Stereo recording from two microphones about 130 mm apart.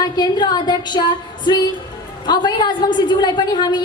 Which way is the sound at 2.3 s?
35° left (ahead or behind).